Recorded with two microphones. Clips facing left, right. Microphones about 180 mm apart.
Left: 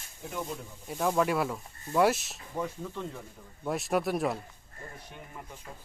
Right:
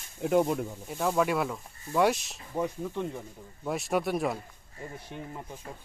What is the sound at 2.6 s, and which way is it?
Speech, 15° right (ahead or behind).